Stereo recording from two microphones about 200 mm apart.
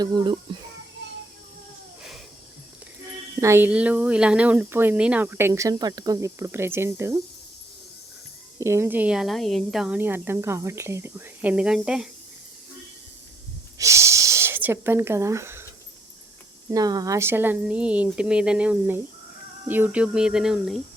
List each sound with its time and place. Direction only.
0.0 s speech: 20° right (ahead or behind)
3.4 s speech: 10° right (ahead or behind)
8.5 s speech: 15° right (ahead or behind)
13.7 s speech: 15° right (ahead or behind)
16.6 s speech: 20° right (ahead or behind); by 20.8 s centre (ahead or behind)